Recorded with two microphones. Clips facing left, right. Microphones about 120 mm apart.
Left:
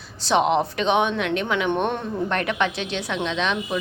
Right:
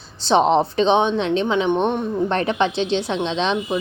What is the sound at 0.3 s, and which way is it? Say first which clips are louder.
A woman's voice: right 4 dB; 30° right (ahead or behind).